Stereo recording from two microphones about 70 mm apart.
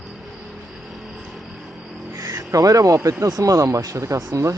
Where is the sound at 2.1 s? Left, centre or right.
Right.